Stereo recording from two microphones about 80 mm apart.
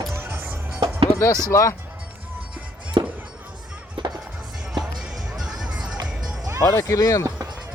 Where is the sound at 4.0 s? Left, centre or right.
Right.